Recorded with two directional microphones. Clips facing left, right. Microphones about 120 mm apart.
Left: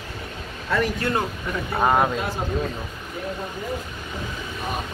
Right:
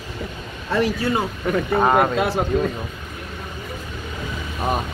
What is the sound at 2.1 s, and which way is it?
Speech, 90° right.